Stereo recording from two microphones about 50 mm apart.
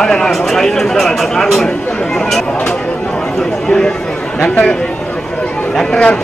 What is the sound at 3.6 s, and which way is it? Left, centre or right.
Speech, centre.